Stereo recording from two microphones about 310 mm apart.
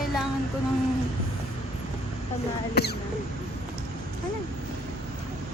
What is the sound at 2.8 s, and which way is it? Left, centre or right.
Speech, left.